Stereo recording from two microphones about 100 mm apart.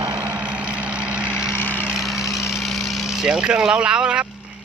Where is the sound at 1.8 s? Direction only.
5° right (ahead or behind).